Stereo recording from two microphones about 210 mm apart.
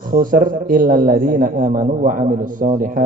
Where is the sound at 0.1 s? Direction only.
40° right (ahead or behind).